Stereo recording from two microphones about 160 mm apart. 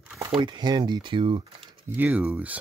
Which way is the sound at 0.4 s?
25° right (ahead or behind).